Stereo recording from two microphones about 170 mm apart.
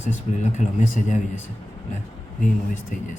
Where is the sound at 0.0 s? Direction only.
45° left (ahead or behind).